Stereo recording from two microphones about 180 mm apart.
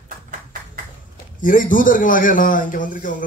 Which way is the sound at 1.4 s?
45° left (ahead or behind).